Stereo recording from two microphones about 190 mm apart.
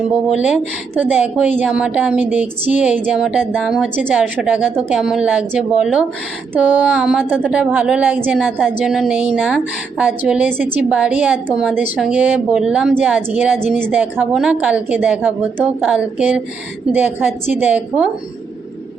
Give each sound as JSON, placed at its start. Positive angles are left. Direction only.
{"t": 0.3, "sound": "a woman's voice", "side_deg": -5}
{"t": 13.7, "sound": "a woman's voice", "side_deg": 5}
{"t": 13.9, "sound": "a woman's voice", "side_deg": -5}